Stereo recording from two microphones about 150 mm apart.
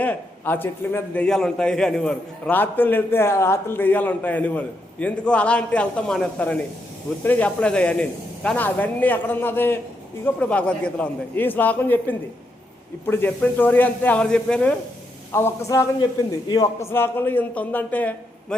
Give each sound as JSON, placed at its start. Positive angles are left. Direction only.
{"t": 0.0, "sound": "a man's voice", "side_deg": 10}
{"t": 16.9, "sound": "a man's voice", "side_deg": 15}